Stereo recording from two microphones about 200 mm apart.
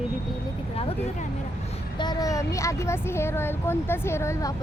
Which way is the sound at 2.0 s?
20° left (ahead or behind).